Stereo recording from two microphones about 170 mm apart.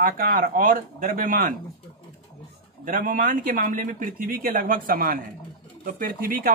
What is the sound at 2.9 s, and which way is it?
Speech, 55° right (ahead or behind).